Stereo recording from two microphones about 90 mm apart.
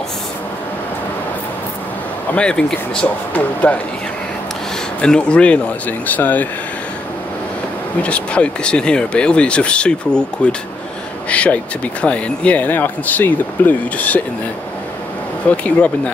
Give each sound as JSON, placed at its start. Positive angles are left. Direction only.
{"t": 2.3, "sound": "speech", "side_deg": 10}
{"t": 5.0, "sound": "speech", "side_deg": 10}
{"t": 8.0, "sound": "speech", "side_deg": 15}
{"t": 15.5, "sound": "speech", "side_deg": 15}